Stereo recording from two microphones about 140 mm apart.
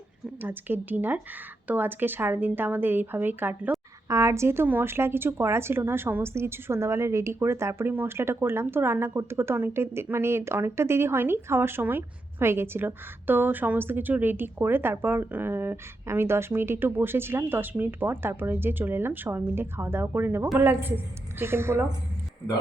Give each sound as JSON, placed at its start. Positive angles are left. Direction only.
{"t": 0.4, "sound": "a woman's voice", "side_deg": -15}